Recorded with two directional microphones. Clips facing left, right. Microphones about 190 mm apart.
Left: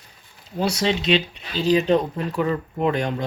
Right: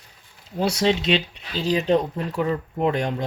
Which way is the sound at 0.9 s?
50° right (ahead or behind).